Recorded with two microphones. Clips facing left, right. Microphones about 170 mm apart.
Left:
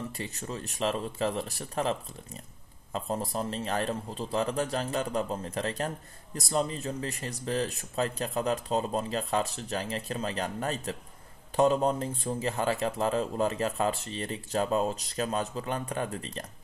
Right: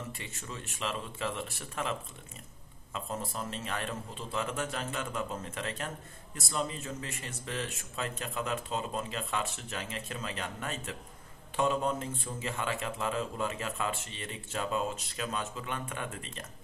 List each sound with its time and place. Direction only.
0.2 s speech: 40° left (ahead or behind)